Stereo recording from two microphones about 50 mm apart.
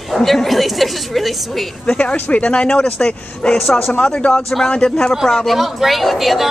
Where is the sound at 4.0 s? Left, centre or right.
Left.